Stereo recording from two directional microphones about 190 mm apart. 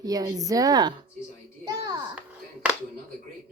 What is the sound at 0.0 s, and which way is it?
A child's voice, 20° right (ahead or behind).